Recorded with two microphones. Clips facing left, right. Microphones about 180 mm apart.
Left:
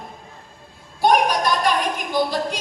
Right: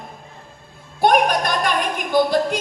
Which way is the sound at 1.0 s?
50° right (ahead or behind).